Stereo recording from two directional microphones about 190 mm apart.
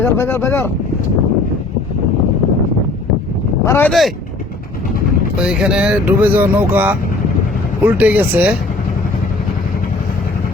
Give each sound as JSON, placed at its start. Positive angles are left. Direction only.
{"t": 0.0, "sound": "speech", "side_deg": 10}
{"t": 3.7, "sound": "speech", "side_deg": 10}
{"t": 5.4, "sound": "speech", "side_deg": -5}